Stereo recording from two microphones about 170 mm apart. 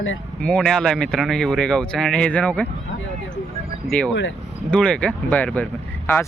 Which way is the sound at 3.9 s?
5° left (ahead or behind).